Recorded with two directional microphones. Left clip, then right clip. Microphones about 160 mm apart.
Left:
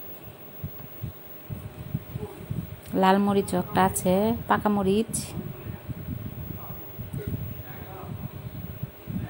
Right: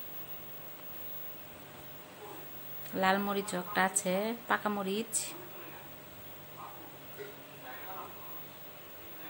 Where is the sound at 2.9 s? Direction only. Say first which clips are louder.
Left 8 dB; 25° left (ahead or behind).